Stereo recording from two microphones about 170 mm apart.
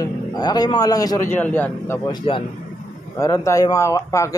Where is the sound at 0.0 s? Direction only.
25° left (ahead or behind).